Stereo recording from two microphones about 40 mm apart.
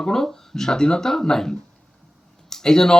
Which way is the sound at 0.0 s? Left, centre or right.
Centre.